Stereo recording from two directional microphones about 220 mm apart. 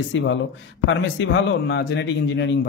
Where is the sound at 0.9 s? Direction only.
55° left (ahead or behind).